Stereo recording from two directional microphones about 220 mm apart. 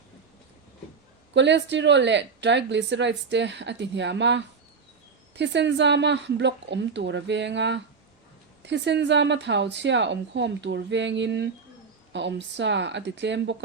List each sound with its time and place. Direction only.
1.3 s a woman's voice: 55° right (ahead or behind)